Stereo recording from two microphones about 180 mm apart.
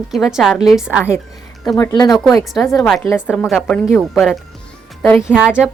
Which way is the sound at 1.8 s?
20° left (ahead or behind).